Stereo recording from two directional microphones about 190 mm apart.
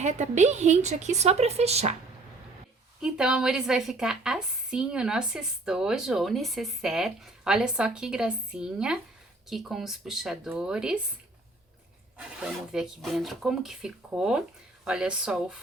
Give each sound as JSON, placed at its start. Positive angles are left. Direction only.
{"t": 0.0, "sound": "speech", "side_deg": -40}
{"t": 3.0, "sound": "a woman's voice", "side_deg": -5}
{"t": 12.1, "sound": "a woman's voice", "side_deg": -5}